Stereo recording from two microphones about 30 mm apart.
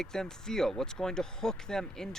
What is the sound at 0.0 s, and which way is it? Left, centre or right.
Speech, centre.